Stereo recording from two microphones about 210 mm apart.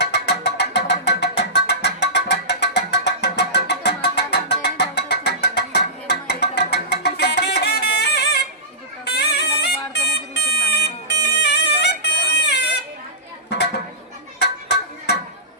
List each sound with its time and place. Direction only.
0.0 s music: 50° left (ahead or behind)
9.0 s a sound: 50° left (ahead or behind)
14.3 s music: 55° left (ahead or behind)